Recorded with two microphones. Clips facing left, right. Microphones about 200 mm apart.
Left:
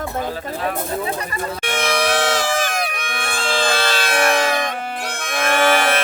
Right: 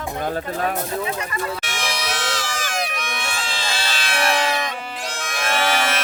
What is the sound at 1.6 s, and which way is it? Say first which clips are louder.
Crowd: left 8 dB; 55° left (ahead or behind).